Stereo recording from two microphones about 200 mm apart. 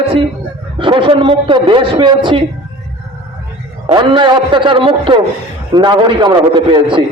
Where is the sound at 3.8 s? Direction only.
25° right (ahead or behind).